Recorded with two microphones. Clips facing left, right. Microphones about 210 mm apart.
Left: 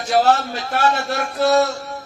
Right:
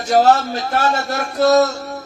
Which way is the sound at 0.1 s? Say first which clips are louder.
Right 3 dB; 40° right (ahead or behind).